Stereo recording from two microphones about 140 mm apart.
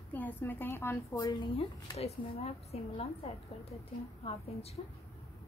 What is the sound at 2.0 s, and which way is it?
Speech, 45° left (ahead or behind).